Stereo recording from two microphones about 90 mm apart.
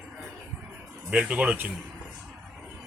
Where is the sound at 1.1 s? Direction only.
15° right (ahead or behind).